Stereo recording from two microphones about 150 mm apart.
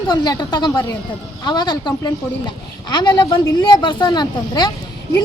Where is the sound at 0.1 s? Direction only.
25° left (ahead or behind).